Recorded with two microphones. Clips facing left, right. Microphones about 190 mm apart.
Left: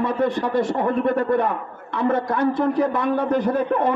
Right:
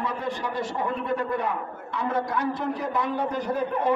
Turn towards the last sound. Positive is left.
turn(degrees=55)  # may be behind; listen again after turning